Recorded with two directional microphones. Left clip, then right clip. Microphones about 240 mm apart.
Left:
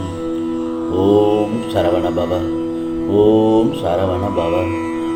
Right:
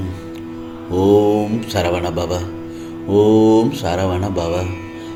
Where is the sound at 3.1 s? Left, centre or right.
Right.